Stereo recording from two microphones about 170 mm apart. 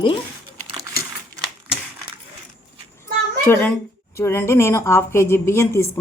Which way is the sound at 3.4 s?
10° left (ahead or behind).